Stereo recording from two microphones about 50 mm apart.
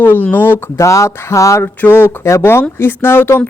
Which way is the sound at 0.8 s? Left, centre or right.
Left.